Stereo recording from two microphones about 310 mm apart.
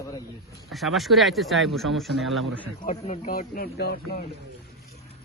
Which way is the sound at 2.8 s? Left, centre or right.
Left.